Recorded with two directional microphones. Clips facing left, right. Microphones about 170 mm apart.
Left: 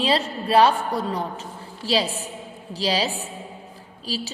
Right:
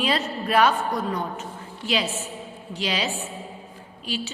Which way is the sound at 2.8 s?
35° left (ahead or behind).